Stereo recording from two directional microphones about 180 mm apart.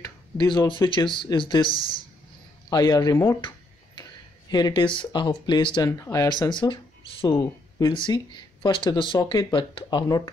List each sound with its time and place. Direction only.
0.0 s speech: 25° left (ahead or behind)
2.7 s speech: 20° left (ahead or behind)
4.5 s speech: 20° left (ahead or behind)